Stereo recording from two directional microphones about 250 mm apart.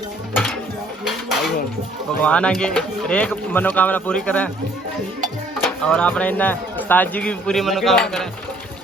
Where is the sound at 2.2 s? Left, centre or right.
Centre.